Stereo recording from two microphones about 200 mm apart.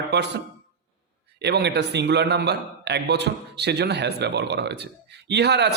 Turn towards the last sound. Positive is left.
turn(degrees=-55)  # may be behind; listen again after turning